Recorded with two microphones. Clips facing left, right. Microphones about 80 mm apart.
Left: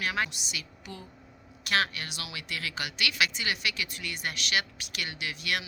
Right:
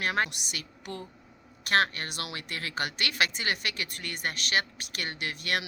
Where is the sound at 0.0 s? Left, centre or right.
Right.